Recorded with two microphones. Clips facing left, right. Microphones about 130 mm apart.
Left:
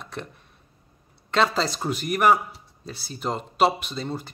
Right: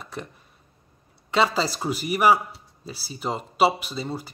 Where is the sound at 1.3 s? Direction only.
5° right (ahead or behind).